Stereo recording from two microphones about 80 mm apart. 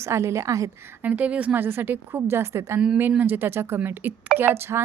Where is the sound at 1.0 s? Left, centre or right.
Centre.